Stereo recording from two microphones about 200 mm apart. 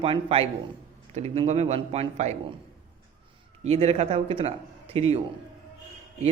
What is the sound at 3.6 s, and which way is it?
A man's voice, 30° right (ahead or behind).